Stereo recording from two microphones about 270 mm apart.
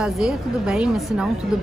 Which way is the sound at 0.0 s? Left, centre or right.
Centre.